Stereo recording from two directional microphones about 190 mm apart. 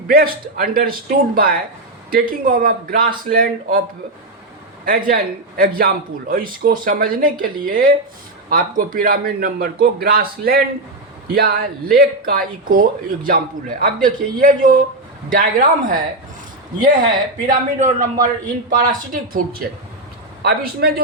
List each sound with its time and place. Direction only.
0.1 s speech: 50° right (ahead or behind)
4.9 s speech: 50° right (ahead or behind)
17.4 s a man's voice: 40° right (ahead or behind)